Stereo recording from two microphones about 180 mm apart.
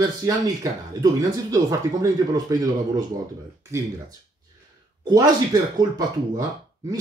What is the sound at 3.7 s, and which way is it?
Speech, 15° right (ahead or behind).